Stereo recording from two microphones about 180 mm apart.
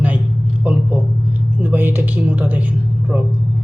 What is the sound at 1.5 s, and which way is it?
Speech, 10° right (ahead or behind).